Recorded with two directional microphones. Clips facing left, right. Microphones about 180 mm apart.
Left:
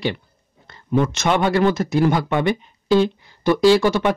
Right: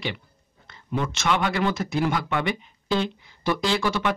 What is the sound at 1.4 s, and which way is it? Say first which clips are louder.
Speech: left 7 dB; 40° left (ahead or behind).